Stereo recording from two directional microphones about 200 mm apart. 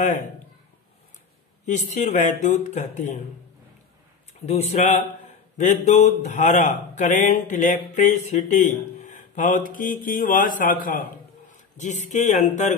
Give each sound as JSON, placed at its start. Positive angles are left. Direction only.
{"t": 1.7, "sound": "speech", "side_deg": 35}
{"t": 4.5, "sound": "a man's voice", "side_deg": 30}